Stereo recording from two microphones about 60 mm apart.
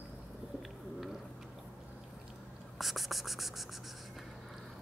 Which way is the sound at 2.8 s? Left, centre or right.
Centre.